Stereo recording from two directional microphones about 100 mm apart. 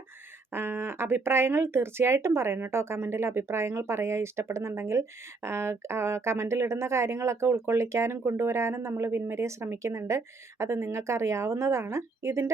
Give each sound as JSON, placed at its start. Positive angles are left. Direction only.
{"t": 0.5, "sound": "speech", "side_deg": -25}